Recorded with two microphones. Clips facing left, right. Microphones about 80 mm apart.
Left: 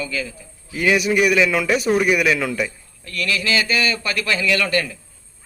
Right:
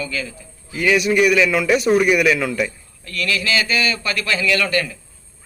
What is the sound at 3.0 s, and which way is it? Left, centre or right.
A man's voice, left.